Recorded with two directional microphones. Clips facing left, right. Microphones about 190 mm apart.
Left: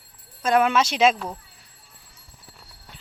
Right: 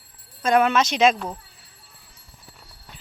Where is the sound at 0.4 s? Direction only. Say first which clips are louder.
Right 1 dB; 5° left (ahead or behind).